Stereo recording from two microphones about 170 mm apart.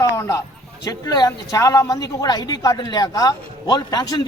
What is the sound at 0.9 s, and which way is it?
Speech, 20° left (ahead or behind).